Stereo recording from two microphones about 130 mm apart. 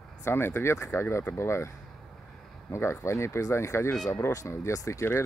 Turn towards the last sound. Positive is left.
turn(degrees=25)  # may be behind; listen again after turning